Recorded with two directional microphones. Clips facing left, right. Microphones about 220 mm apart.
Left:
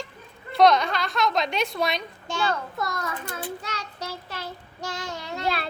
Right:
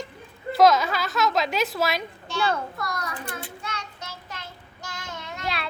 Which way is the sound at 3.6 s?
35° left (ahead or behind).